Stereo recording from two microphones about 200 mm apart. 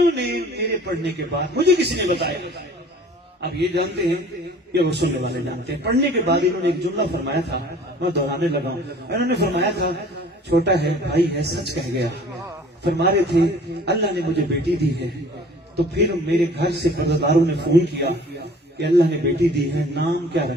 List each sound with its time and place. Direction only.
0.2 s a man's voice: 55° right (ahead or behind)
3.5 s a man's voice: 55° right (ahead or behind)